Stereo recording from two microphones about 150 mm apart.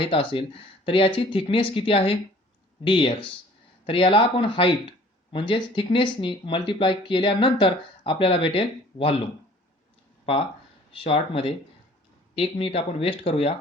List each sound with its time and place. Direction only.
0.0 s speech: 35° left (ahead or behind)
10.9 s speech: 35° left (ahead or behind)